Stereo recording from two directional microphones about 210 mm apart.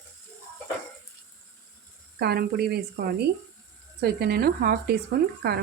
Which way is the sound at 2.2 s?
50° right (ahead or behind).